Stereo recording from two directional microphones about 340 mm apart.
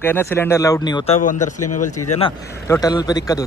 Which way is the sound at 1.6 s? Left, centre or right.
Left.